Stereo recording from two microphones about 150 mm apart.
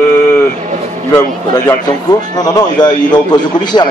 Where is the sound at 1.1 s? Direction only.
25° left (ahead or behind).